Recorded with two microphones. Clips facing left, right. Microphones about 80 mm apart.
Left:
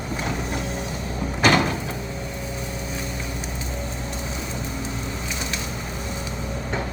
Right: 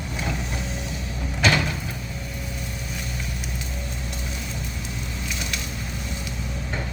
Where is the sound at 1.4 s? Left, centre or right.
Left.